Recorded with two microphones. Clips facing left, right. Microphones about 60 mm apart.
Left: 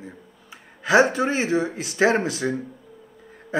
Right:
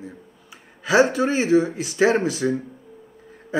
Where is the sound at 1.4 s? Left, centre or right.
Left.